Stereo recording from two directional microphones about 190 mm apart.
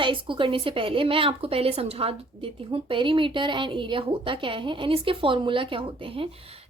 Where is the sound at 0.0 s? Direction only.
25° right (ahead or behind).